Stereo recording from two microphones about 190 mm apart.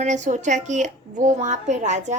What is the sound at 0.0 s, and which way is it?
Speech, 40° right (ahead or behind).